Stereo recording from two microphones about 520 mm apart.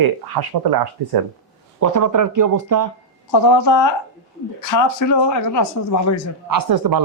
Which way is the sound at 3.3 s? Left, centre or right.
Left.